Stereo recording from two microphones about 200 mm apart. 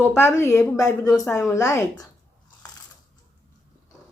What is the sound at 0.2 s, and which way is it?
Speech, 10° left (ahead or behind).